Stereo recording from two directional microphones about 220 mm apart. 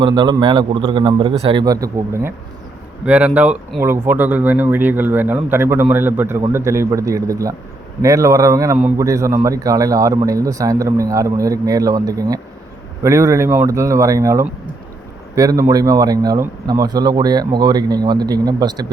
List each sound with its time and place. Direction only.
0.0 s a man's voice: 20° right (ahead or behind)